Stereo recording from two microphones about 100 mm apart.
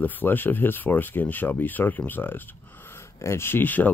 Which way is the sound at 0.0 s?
20° left (ahead or behind).